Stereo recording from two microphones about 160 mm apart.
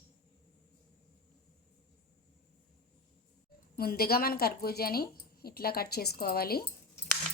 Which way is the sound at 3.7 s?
70° left (ahead or behind).